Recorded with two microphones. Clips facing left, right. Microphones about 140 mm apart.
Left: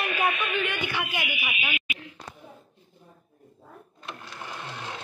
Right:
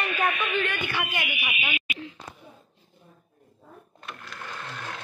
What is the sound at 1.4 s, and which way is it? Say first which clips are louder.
Speech: even; centre (ahead or behind).